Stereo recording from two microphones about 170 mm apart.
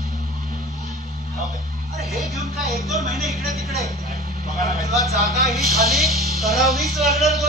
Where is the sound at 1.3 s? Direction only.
20° left (ahead or behind).